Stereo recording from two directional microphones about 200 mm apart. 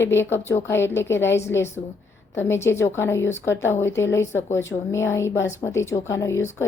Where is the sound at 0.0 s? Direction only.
10° left (ahead or behind).